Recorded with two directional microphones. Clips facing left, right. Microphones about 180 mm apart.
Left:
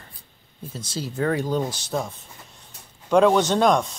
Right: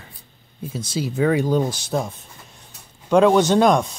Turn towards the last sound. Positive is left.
turn(degrees=-10)  # may be behind; listen again after turning